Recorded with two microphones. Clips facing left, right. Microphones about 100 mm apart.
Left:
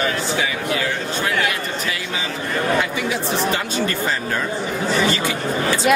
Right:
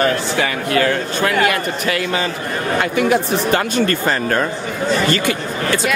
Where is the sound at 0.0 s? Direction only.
55° right (ahead or behind).